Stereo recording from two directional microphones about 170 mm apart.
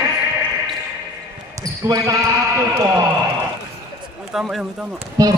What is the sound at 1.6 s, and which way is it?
Speech, 20° right (ahead or behind).